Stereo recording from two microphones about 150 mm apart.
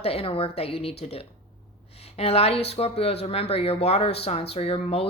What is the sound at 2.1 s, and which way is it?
Speech, 45° left (ahead or behind).